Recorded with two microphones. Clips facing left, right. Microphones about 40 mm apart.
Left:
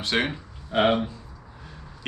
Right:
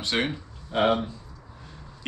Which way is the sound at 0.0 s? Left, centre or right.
Centre.